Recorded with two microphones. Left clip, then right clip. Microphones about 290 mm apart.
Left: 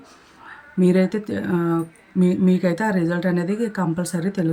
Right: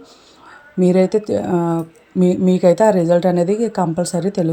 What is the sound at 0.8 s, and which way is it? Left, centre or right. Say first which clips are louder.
Speech: right 5 dB; centre.